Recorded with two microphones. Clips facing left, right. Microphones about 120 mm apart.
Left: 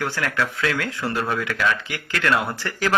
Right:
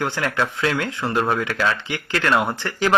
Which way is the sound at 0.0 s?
25° right (ahead or behind).